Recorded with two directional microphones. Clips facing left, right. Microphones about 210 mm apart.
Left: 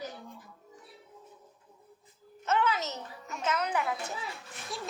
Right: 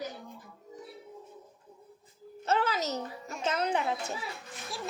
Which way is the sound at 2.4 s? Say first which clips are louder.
Even; 35° right (ahead or behind).